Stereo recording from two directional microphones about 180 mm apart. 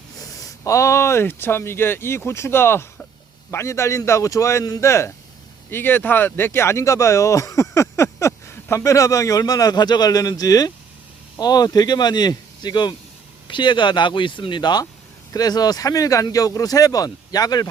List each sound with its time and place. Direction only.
0.2 s speech: 20° left (ahead or behind)